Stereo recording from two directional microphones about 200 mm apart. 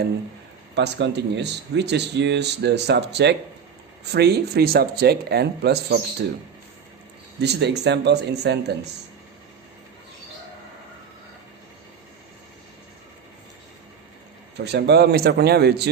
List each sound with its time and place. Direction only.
0.8 s speech: 60° right (ahead or behind)
7.4 s speech: 55° right (ahead or behind)
14.6 s speech: 55° right (ahead or behind)